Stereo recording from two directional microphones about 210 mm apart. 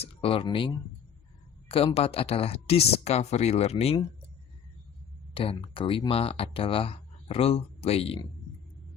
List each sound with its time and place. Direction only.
0.0 s speech: 25° left (ahead or behind)
5.3 s speech: 25° left (ahead or behind)